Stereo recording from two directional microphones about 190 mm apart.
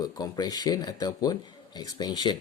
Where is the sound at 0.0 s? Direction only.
20° left (ahead or behind).